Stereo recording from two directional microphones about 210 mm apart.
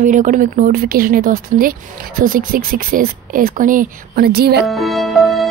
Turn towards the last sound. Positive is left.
turn(degrees=0)  # may be behind; listen again after turning